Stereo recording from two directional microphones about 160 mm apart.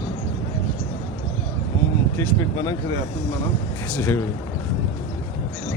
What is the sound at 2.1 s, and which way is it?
Speech, 25° left (ahead or behind).